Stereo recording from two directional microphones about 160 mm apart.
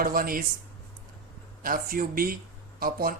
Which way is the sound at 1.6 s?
60° right (ahead or behind).